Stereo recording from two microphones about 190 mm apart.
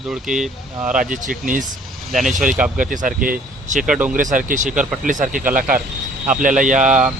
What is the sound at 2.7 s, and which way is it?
Speech, 45° right (ahead or behind).